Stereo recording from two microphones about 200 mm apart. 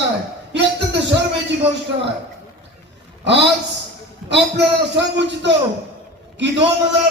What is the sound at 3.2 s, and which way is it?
Speech, 60° right (ahead or behind).